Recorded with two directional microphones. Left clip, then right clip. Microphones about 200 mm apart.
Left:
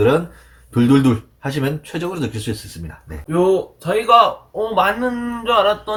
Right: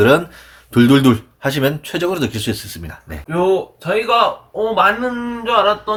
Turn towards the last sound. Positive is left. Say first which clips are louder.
# right 1 dB
turn(degrees=15)  # may be behind; listen again after turning